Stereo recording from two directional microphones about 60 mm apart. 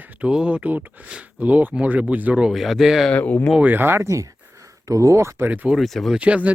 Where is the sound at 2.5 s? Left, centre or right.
Centre.